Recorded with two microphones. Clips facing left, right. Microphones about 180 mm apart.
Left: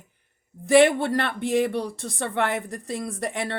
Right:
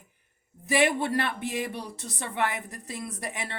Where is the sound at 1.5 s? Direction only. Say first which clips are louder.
Left 10 dB; 70° left (ahead or behind).